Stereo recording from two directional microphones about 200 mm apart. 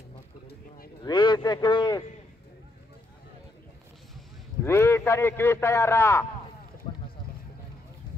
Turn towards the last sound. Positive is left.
turn(degrees=30)  # may be behind; listen again after turning